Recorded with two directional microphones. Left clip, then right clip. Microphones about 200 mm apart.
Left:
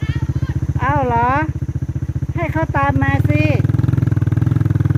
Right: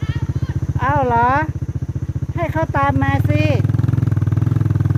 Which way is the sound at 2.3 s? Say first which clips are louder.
Even; 10° right (ahead or behind).